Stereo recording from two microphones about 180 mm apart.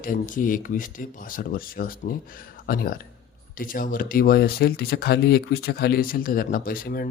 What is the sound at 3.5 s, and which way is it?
Speech, 50° left (ahead or behind).